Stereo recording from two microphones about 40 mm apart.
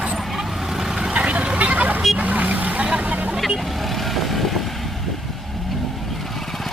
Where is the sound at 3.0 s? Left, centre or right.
Right.